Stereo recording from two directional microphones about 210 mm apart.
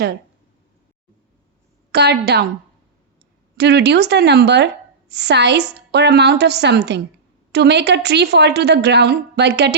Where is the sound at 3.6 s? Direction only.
55° right (ahead or behind).